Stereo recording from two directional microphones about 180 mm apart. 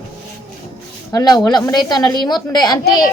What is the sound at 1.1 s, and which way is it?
A woman's voice, 20° left (ahead or behind).